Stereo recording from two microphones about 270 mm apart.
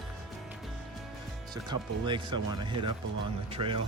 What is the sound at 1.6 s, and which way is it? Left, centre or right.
Speech, centre.